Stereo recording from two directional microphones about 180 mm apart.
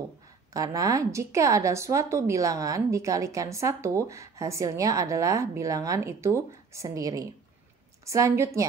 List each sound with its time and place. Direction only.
0.5 s speech: 20° right (ahead or behind)